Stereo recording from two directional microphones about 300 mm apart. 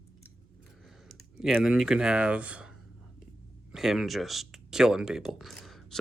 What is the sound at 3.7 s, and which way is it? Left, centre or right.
Speech, centre.